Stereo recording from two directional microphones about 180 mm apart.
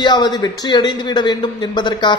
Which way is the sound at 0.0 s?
25° left (ahead or behind).